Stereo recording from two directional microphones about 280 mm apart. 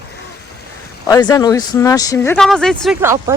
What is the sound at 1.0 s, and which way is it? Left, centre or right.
Speech, centre.